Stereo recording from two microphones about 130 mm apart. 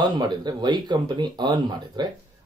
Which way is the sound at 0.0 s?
35° right (ahead or behind).